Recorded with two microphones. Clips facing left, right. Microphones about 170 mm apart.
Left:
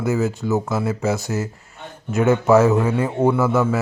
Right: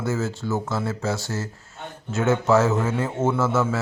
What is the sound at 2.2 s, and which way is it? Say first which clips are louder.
Speech: left 5 dB; centre (ahead or behind).